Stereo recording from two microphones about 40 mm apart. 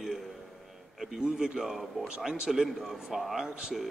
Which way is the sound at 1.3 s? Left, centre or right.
Centre.